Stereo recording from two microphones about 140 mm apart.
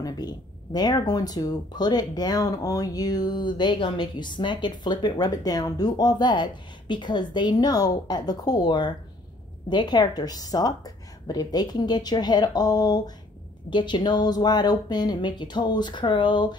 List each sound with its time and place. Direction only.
0.0 s speech: 30° left (ahead or behind)